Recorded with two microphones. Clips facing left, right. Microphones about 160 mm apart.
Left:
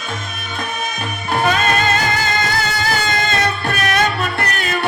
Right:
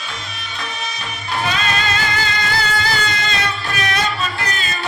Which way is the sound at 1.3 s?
50° left (ahead or behind).